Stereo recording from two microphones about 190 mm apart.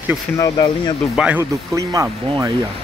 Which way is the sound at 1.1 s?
10° right (ahead or behind).